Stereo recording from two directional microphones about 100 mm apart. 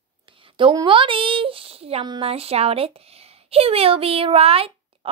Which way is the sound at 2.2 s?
85° right.